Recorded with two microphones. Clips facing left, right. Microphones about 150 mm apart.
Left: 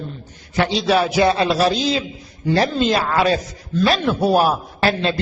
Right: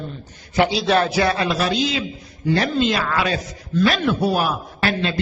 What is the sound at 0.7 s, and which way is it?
A man's voice, 5° left (ahead or behind).